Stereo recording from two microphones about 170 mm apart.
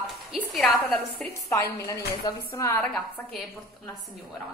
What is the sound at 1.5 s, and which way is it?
A woman's voice, 20° left (ahead or behind).